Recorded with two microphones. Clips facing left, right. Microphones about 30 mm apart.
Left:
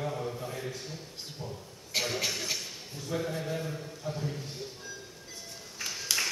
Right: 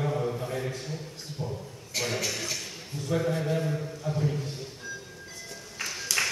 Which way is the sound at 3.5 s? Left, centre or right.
Centre.